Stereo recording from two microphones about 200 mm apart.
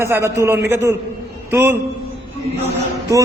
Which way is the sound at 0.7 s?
15° right (ahead or behind).